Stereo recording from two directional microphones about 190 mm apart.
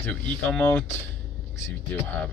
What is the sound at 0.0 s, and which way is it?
Speech, 10° left (ahead or behind).